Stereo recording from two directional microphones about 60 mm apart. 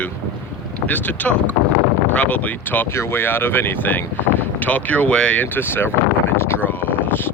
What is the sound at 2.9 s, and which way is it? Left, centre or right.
Speech, left.